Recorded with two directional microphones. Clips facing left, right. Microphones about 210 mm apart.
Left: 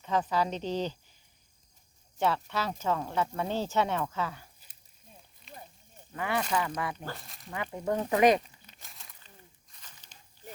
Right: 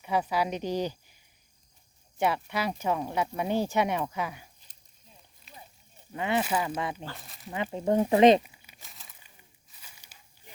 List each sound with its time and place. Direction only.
0.0 s speech: 10° right (ahead or behind)
2.1 s speech: 15° right (ahead or behind)
5.5 s a sound: centre (ahead or behind)
6.1 s speech: 20° right (ahead or behind)
6.4 s speech: 5° right (ahead or behind)
6.7 s speech: 25° right (ahead or behind)
7.3 s speech: 5° right (ahead or behind)
7.5 s speech: 20° right (ahead or behind)
8.4 s a sound: 10° right (ahead or behind)